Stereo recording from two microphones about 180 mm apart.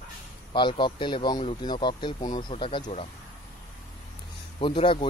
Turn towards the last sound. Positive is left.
turn(degrees=25)  # may be behind; listen again after turning